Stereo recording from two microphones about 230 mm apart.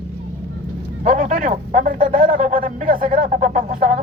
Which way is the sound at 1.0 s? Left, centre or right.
Right.